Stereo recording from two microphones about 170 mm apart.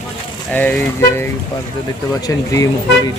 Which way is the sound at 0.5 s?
10° left (ahead or behind).